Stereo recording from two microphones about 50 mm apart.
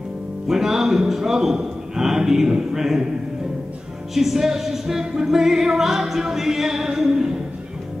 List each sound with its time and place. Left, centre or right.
0.5 s a man's voice: centre
4.1 s music: centre